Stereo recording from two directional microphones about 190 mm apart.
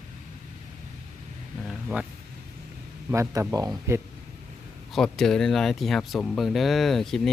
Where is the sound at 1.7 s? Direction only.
Centre (ahead or behind).